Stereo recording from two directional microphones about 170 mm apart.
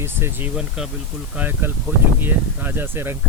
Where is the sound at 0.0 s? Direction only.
15° right (ahead or behind).